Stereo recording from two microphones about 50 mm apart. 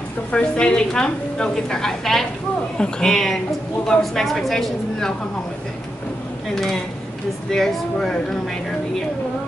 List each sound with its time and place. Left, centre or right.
0.3 s a woman's voice: centre
6.5 s a woman's voice: centre